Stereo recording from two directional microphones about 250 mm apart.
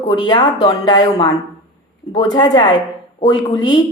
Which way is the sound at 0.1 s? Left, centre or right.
Centre.